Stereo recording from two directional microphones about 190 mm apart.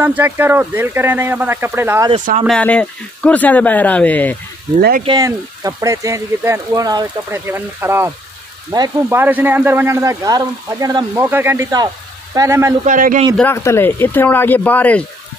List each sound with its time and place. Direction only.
0.0 s speech: 10° right (ahead or behind)
2.4 s speech: 5° left (ahead or behind)
5.0 s speech: 20° right (ahead or behind)
12.8 s a man's voice: 45° right (ahead or behind)
13.4 s speech: 15° left (ahead or behind)